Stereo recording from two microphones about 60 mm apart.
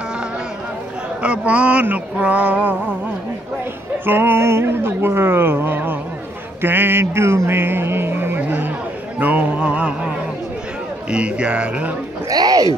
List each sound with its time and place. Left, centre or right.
1.2 s speech: right
4.0 s speech: right
8.4 s music: right
9.2 s speech: right
12.3 s speech: right